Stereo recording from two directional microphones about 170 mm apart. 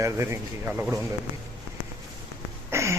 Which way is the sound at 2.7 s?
15° right (ahead or behind).